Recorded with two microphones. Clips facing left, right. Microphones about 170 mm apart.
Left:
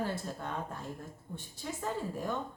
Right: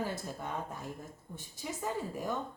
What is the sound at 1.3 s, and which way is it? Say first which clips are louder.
A woman's voice: even; 10° right (ahead or behind).